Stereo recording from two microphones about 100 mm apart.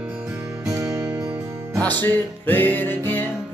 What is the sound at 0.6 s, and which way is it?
Music, 35° right (ahead or behind).